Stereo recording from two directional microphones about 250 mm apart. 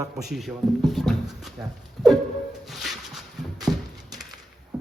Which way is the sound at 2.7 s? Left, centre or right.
Centre.